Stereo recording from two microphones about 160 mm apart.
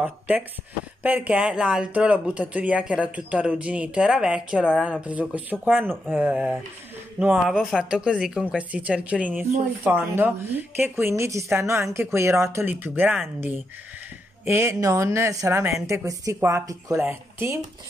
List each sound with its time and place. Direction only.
1.0 s speech: 10° right (ahead or behind)
14.4 s speech: 15° right (ahead or behind)